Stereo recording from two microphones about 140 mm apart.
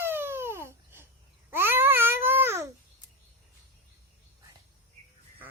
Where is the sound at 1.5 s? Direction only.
15° right (ahead or behind).